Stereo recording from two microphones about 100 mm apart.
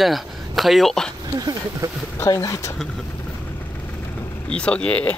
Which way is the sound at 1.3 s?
40° right (ahead or behind).